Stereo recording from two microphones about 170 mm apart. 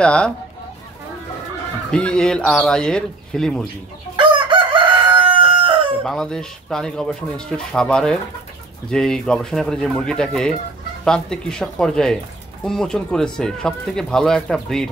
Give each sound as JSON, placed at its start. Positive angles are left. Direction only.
{"t": 0.0, "sound": "speech", "side_deg": 5}
{"t": 1.9, "sound": "speech", "side_deg": 5}
{"t": 4.2, "sound": "chicken", "side_deg": -30}
{"t": 5.1, "sound": "crowing", "side_deg": -30}
{"t": 6.0, "sound": "speech", "side_deg": 5}